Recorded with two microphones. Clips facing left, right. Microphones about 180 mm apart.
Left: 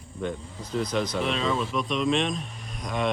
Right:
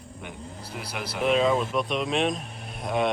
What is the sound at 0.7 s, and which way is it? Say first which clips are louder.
Speech: left 7 dB; 10° right (ahead or behind).